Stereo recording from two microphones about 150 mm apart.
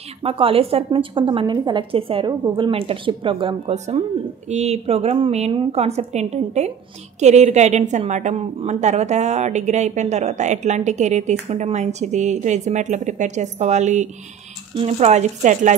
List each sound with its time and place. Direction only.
0.2 s a woman's voice: 40° right (ahead or behind)
3.7 s a woman's voice: 50° right (ahead or behind)